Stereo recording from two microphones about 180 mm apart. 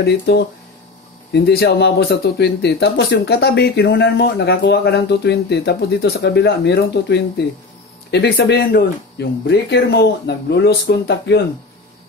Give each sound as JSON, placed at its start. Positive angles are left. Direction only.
{"t": 0.0, "sound": "speech", "side_deg": 70}